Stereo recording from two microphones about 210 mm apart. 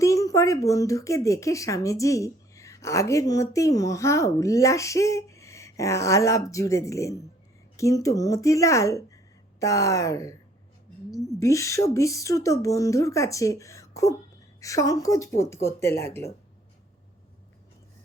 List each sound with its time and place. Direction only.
0.0 s speech: 15° left (ahead or behind)
11.3 s speech: 15° left (ahead or behind)